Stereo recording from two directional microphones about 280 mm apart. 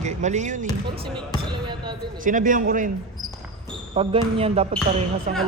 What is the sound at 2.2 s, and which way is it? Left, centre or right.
Speech, right.